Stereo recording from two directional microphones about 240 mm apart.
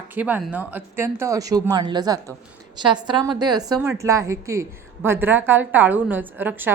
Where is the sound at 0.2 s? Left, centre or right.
Centre.